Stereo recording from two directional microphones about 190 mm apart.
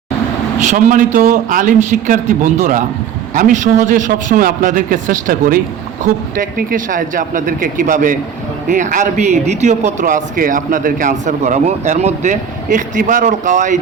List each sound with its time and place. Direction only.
0.6 s a man's voice: 40° right (ahead or behind)